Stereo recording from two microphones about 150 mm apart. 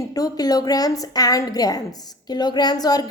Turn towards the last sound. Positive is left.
turn(degrees=25)  # may be behind; listen again after turning